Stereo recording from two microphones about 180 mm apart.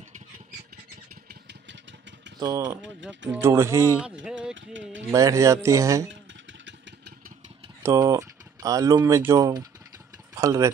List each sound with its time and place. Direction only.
1.3 s vehicle: 80° right
2.4 s speech: 20° right (ahead or behind)
2.8 s speech: 90° right
3.3 s speech: 15° right (ahead or behind)
4.0 s speech: 5° right (ahead or behind)
4.6 s speech: 90° right
5.1 s speech: 15° right (ahead or behind)
7.8 s speech: 20° right (ahead or behind)